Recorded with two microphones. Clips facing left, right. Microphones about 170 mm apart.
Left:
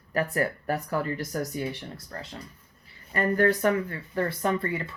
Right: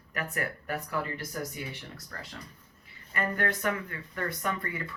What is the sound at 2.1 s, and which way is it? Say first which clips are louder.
Speech: left 5 dB; 30° left (ahead or behind).